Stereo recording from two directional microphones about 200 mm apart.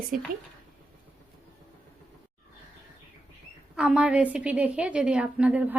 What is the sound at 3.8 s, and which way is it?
A woman's voice, 5° right (ahead or behind).